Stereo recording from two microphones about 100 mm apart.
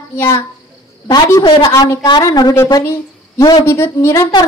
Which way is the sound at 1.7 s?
35° left (ahead or behind).